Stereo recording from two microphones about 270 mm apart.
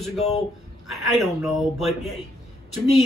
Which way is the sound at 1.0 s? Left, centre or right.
Centre.